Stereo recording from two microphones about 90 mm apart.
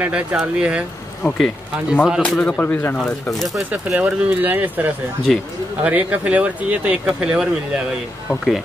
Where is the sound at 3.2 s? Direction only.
Centre (ahead or behind).